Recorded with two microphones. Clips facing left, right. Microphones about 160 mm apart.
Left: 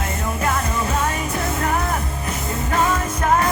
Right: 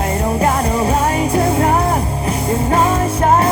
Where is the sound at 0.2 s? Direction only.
35° right (ahead or behind).